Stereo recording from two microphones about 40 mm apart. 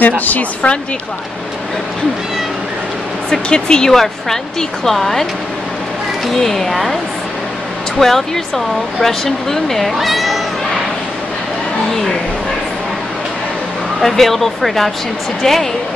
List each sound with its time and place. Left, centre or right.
0.2 s a woman's voice: left
3.3 s speech: centre
8.0 s speech: centre
14.0 s speech: centre